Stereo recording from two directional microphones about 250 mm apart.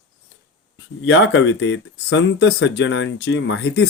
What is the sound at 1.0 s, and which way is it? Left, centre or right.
Speech, left.